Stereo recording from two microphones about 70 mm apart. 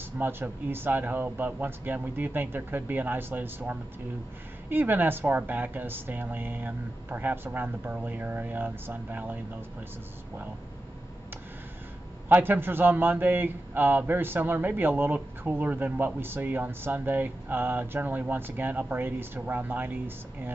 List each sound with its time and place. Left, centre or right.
0.2 s a man's voice: right
12.3 s a man's voice: right